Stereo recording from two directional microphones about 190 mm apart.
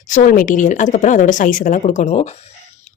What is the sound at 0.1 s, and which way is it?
Speech, 45° left (ahead or behind).